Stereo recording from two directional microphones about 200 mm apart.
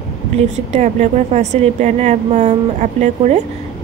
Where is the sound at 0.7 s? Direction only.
35° right (ahead or behind).